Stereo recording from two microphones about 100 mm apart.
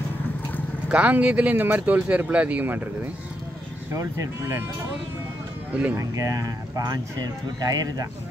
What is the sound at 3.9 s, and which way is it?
Speech, 30° right (ahead or behind).